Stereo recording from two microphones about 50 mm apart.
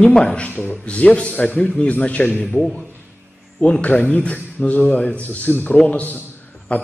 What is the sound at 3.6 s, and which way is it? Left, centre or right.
A man's voice, left.